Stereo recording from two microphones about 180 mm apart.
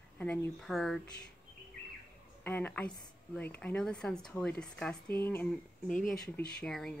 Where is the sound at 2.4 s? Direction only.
10° left (ahead or behind).